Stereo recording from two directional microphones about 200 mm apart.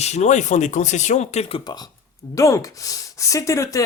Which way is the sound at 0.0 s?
35° left (ahead or behind).